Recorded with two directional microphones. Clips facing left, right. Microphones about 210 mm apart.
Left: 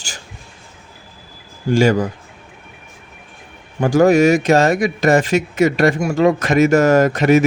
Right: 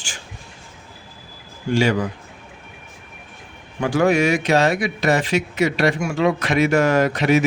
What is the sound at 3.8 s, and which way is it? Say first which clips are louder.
Speech: left 6 dB; 40° left (ahead or behind).